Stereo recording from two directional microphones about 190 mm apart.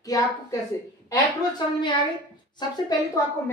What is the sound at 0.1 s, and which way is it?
A woman's voice, 20° left (ahead or behind).